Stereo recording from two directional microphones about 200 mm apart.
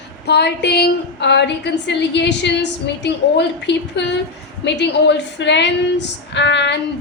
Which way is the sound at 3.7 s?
60° left (ahead or behind).